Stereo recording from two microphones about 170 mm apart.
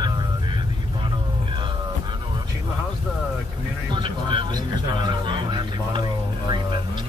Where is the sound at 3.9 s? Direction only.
30° right (ahead or behind).